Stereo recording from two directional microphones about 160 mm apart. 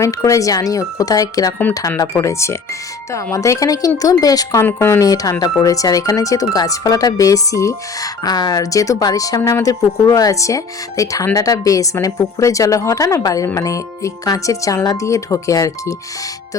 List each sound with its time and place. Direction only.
0.0 s speech: 20° left (ahead or behind)